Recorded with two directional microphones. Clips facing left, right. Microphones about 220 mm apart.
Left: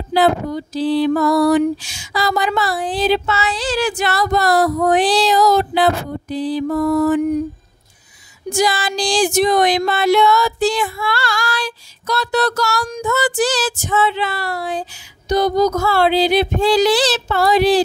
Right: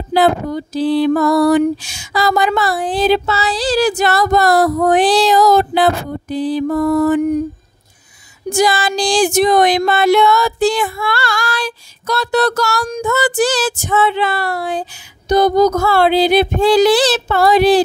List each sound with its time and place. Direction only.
0.1 s speech: 50° right (ahead or behind)
3.3 s speech: 35° right (ahead or behind); by 7.2 s 55° right (ahead or behind)
8.5 s speech: 50° right (ahead or behind)